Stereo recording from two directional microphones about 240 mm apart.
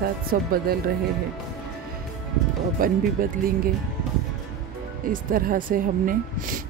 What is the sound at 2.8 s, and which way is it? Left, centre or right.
Speech, right.